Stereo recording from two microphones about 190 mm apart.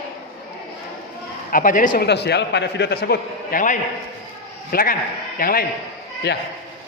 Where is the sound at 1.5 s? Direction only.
45° left (ahead or behind).